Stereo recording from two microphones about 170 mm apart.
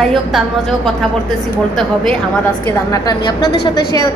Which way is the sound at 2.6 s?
20° left (ahead or behind).